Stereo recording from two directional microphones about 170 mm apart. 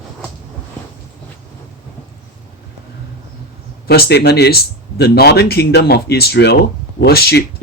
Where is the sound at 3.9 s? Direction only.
70° left (ahead or behind).